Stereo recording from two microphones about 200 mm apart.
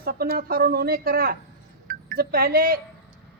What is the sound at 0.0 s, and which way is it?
A woman's voice, 50° right (ahead or behind).